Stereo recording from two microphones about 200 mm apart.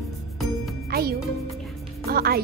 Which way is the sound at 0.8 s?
50° right (ahead or behind).